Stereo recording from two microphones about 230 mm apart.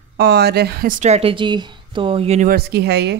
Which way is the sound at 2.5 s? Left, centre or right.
Right.